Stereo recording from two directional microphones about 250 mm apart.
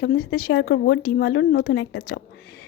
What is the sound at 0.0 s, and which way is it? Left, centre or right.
A woman's voice, left.